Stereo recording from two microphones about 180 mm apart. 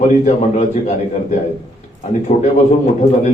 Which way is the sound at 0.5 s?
40° left (ahead or behind).